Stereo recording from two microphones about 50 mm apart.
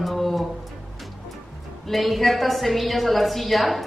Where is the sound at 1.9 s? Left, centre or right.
Centre.